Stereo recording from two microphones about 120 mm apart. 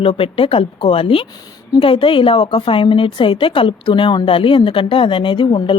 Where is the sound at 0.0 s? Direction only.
50° left (ahead or behind).